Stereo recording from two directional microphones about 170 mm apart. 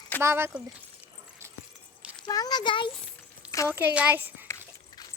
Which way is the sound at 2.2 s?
20° left (ahead or behind).